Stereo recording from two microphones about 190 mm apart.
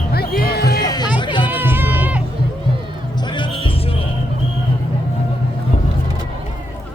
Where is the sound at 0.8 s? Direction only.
20° left (ahead or behind).